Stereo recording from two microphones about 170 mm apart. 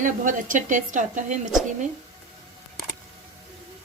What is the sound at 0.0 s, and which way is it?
A woman's voice, 50° right (ahead or behind).